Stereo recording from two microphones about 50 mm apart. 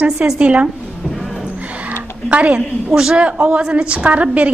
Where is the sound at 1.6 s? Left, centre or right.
Right.